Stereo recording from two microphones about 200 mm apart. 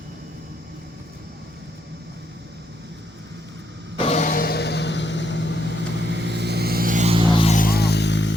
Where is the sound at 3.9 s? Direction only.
30° left (ahead or behind); by 5.5 s 65° left (ahead or behind).